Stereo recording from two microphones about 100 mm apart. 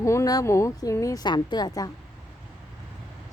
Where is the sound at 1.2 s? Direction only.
45° left (ahead or behind).